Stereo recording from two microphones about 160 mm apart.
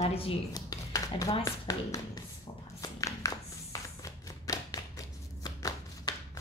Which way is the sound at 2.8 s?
20° left (ahead or behind).